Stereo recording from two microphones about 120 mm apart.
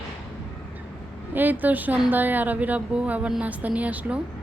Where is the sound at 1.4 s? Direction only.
15° right (ahead or behind).